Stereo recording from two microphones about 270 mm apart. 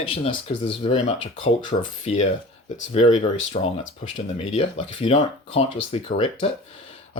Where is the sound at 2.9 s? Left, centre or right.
Left.